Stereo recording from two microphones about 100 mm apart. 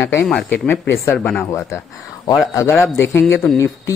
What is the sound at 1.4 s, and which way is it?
Speech, 30° left (ahead or behind).